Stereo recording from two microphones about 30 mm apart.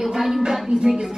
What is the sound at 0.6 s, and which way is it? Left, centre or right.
Speech, right.